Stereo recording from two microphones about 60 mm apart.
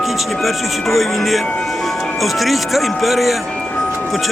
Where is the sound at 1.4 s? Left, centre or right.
Centre.